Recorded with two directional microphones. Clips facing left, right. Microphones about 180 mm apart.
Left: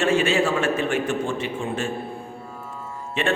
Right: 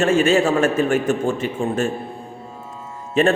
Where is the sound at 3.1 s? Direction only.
40° right (ahead or behind).